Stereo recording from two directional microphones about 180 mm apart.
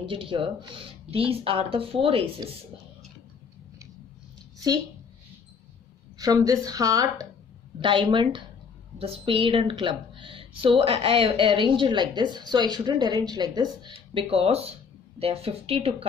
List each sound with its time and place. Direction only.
0.0 s a woman's voice: 30° right (ahead or behind)
6.1 s a woman's voice: 20° right (ahead or behind)